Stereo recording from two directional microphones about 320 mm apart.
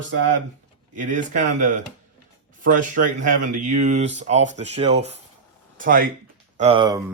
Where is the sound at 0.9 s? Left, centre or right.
Right.